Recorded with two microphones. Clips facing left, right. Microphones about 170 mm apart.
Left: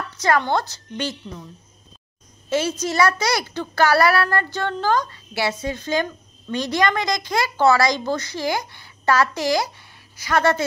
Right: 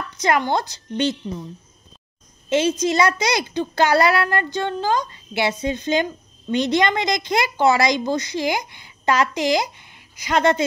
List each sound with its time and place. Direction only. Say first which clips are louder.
0.2 s a woman's voice: even; 15° right (ahead or behind)
2.5 s a woman's voice: right 3 dB; 20° right (ahead or behind)